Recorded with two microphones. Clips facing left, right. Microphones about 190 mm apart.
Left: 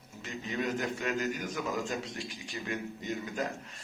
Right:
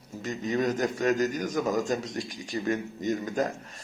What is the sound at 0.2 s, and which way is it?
A man's voice, 40° right (ahead or behind).